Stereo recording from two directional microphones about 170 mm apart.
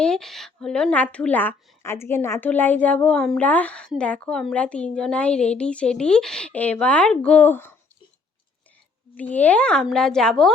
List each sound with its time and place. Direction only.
0.0 s a woman's voice: 5° left (ahead or behind)
9.1 s a woman's voice: 10° left (ahead or behind)